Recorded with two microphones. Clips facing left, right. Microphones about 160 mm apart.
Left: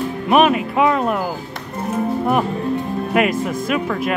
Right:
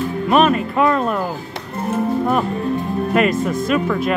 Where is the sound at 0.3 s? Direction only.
10° left (ahead or behind).